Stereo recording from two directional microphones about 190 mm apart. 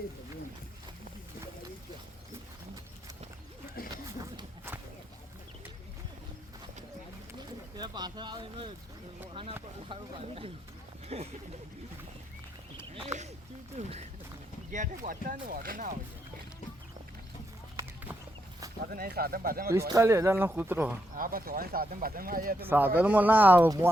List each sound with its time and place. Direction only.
3.9 s a sound: 20° right (ahead or behind)
7.3 s a sound: 20° right (ahead or behind)
9.9 s speech: 30° right (ahead or behind)
12.9 s a sound: 30° right (ahead or behind)
13.7 s speech: 35° right (ahead or behind)
18.9 s speech: 50° right (ahead or behind)
19.9 s speech: 15° right (ahead or behind)
21.2 s speech: 50° right (ahead or behind)
23.0 s speech: 10° right (ahead or behind)